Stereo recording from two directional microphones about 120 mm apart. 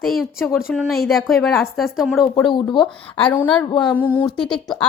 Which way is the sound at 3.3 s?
10° left (ahead or behind).